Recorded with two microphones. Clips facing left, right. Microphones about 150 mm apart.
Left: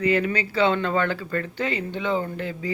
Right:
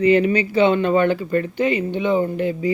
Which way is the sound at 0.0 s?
20° right (ahead or behind).